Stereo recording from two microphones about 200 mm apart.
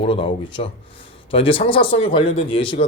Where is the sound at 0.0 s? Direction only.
25° left (ahead or behind).